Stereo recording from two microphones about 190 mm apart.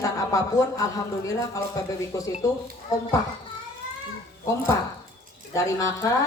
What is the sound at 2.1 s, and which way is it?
Speech, 15° left (ahead or behind).